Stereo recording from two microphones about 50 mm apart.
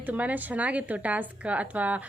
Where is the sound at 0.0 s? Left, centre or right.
Right.